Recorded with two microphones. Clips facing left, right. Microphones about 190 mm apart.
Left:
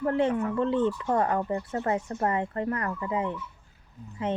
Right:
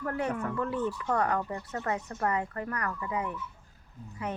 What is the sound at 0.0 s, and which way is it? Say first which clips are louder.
Speech: left 7 dB; 25° left (ahead or behind).